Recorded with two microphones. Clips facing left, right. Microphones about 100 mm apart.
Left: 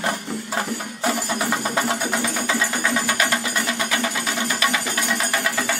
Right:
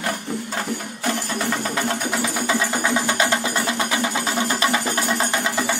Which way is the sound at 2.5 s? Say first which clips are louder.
Right 2 dB; 20° right (ahead or behind).